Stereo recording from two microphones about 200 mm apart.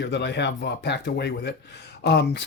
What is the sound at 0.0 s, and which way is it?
Speech, 60° left (ahead or behind).